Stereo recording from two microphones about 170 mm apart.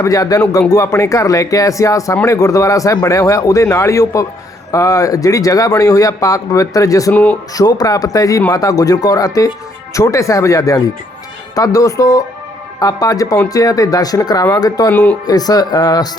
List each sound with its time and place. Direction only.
0.0 s speech: 20° left (ahead or behind)
7.1 s speech: 10° left (ahead or behind)
7.5 s speech: 20° left (ahead or behind)